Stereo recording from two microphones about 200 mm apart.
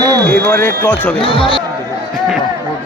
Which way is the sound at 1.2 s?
25° left (ahead or behind).